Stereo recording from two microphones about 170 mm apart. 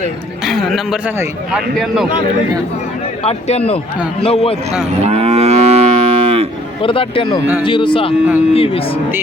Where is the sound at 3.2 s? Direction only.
35° left (ahead or behind).